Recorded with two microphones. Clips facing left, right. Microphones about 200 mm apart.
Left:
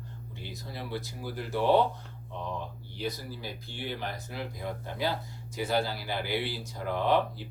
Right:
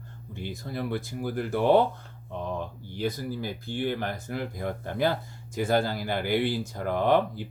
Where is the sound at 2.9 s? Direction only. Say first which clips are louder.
Right 6 dB; 50° right (ahead or behind).